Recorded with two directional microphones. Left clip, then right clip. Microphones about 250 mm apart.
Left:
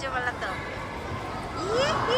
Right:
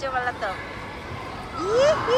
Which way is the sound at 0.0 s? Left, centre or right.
Centre.